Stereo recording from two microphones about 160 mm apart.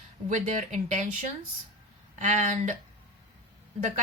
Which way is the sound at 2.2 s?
50° right (ahead or behind).